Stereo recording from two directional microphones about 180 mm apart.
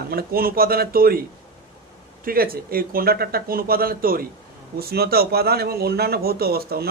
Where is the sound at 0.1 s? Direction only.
55° right (ahead or behind).